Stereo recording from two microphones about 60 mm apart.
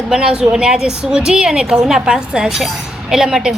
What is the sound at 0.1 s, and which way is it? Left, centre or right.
A woman's voice, centre.